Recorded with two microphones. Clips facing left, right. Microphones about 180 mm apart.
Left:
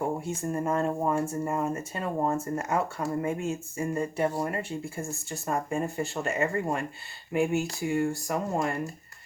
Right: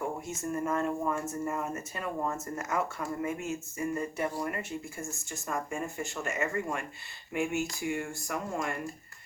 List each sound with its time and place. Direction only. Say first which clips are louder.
0.0 s speech: left 5 dB; 30° left (ahead or behind)